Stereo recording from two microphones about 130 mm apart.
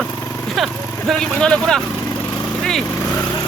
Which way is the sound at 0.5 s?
Centre (ahead or behind).